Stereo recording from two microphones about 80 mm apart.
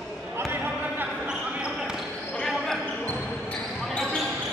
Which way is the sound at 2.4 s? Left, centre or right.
Centre.